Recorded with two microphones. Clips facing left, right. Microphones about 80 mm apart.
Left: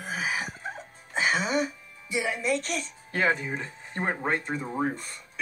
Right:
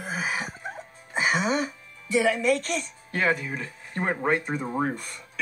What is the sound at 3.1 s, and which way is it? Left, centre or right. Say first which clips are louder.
Speech: right 1 dB; left.